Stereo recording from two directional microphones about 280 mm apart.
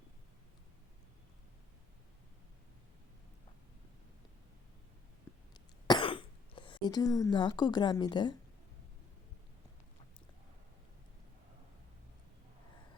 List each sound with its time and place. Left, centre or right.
5.9 s speech: centre